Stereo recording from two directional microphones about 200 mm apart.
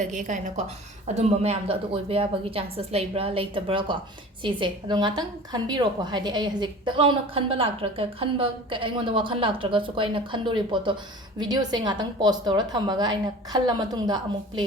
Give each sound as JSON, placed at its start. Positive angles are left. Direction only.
{"t": 0.0, "sound": "a woman's voice", "side_deg": -40}